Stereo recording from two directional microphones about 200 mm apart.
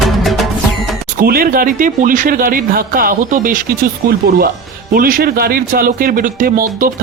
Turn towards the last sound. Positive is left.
turn(degrees=-45)  # may be behind; listen again after turning